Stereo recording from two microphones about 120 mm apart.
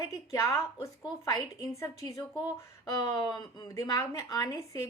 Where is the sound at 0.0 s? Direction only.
30° left (ahead or behind).